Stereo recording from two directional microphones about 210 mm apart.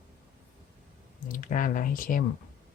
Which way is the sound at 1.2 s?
40° left (ahead or behind).